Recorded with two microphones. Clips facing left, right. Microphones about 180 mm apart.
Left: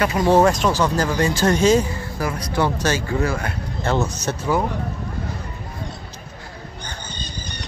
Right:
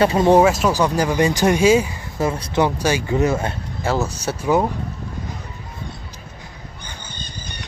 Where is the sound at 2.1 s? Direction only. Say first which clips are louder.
Right 5 dB; 25° right (ahead or behind).